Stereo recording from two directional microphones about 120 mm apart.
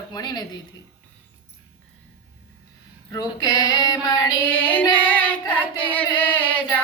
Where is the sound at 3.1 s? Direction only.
30° left (ahead or behind).